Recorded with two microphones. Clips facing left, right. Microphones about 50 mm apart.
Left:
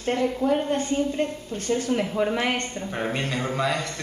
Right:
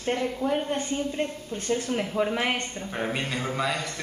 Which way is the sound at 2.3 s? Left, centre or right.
Centre.